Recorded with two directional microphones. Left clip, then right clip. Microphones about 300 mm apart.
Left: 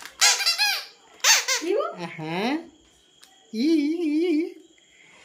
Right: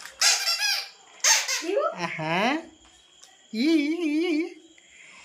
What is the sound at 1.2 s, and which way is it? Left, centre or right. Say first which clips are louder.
Baby laughter: left 3 dB; centre.